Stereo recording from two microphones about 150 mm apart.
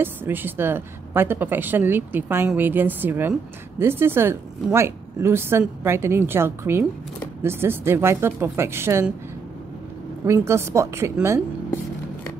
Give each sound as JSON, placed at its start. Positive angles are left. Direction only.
{"t": 0.0, "sound": "speech", "side_deg": -15}
{"t": 10.2, "sound": "a woman's voice", "side_deg": -20}